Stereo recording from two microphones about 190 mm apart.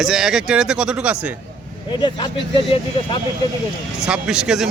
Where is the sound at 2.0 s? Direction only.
25° left (ahead or behind).